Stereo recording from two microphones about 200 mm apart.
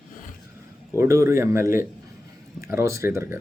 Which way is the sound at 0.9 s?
15° right (ahead or behind).